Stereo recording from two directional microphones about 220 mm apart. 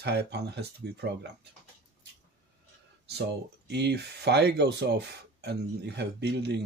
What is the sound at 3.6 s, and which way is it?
Speech, 50° right (ahead or behind).